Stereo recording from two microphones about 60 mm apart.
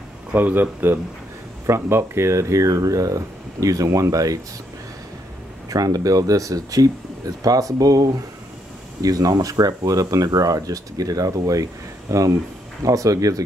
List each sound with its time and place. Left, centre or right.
0.3 s speech: right
1.7 s speech: right
5.7 s speech: right